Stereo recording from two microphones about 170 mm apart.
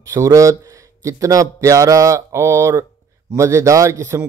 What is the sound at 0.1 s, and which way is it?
A man's voice, 20° right (ahead or behind).